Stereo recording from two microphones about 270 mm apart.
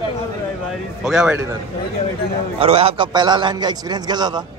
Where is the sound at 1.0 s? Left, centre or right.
Centre.